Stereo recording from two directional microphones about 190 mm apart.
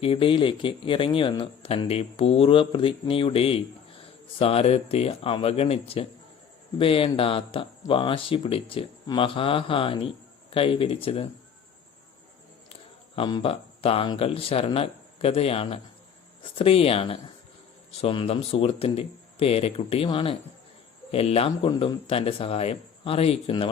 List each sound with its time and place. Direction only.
0.0 s speech: 30° left (ahead or behind)
13.1 s speech: 25° left (ahead or behind)